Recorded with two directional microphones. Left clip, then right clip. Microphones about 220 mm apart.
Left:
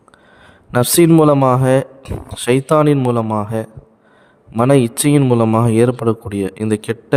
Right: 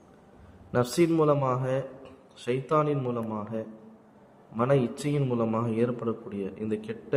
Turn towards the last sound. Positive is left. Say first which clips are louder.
# left 13 dB
turn(degrees=55)  # may be behind; listen again after turning